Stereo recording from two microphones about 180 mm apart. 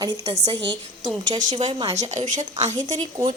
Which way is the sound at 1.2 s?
25° right (ahead or behind).